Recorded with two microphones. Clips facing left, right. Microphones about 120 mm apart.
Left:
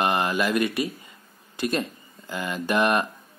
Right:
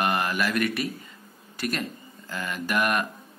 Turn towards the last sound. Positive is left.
turn(degrees=25)  # may be behind; listen again after turning